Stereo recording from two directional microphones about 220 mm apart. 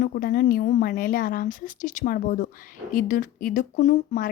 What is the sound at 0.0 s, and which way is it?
Speech, 40° left (ahead or behind).